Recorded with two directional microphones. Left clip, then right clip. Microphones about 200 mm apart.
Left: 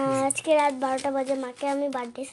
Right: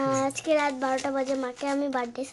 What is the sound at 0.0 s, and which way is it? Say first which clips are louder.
Speech: left 1 dB; 5° left (ahead or behind).